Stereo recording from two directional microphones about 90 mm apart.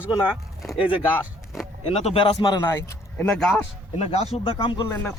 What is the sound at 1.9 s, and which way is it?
Speech, 90° left.